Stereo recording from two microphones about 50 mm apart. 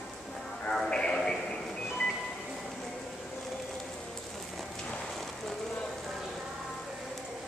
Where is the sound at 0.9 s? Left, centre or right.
Centre.